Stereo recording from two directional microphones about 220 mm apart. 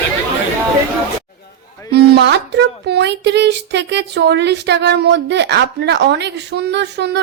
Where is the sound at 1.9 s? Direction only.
45° right (ahead or behind).